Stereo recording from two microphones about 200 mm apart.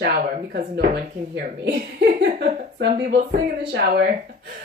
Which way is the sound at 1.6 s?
55° right (ahead or behind).